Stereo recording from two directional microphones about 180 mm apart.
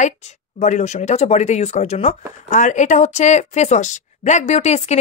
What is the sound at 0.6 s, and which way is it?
Speech, 40° left (ahead or behind).